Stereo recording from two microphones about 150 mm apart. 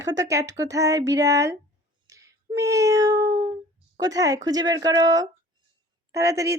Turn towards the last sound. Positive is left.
turn(degrees=-20)  # may be behind; listen again after turning